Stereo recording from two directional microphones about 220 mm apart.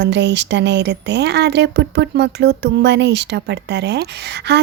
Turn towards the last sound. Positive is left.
turn(degrees=-50)  # may be behind; listen again after turning